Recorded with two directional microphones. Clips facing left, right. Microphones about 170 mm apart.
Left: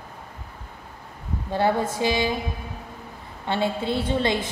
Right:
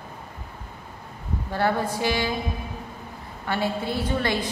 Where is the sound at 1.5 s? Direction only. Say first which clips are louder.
Left 2 dB; 20° left (ahead or behind).